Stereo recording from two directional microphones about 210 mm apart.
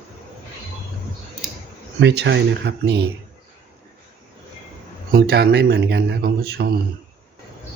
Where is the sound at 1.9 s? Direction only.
55° right (ahead or behind).